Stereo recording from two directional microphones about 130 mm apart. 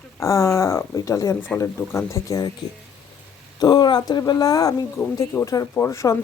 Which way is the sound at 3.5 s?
30° left (ahead or behind).